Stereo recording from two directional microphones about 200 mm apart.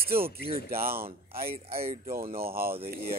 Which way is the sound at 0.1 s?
50° right (ahead or behind).